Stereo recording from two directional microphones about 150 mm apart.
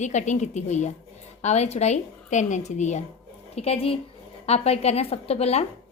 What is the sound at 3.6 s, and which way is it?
A woman's voice, 40° left (ahead or behind).